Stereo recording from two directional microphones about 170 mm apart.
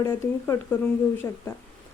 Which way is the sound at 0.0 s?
15° left (ahead or behind).